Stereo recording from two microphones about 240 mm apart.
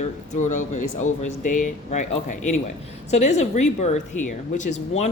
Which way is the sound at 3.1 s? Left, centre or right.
Left.